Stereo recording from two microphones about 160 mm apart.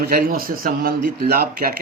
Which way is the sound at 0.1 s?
65° right (ahead or behind).